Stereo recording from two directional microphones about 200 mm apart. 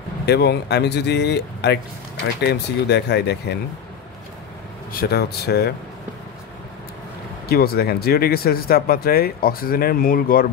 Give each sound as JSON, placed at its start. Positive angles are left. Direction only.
{"t": 0.3, "sound": "speech", "side_deg": 55}
{"t": 4.9, "sound": "speech", "side_deg": 50}
{"t": 7.4, "sound": "speech", "side_deg": 50}